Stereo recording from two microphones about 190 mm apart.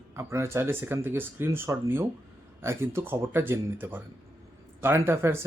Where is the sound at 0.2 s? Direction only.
15° right (ahead or behind).